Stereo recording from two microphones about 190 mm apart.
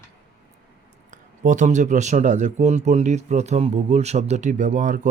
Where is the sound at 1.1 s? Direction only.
40° right (ahead or behind).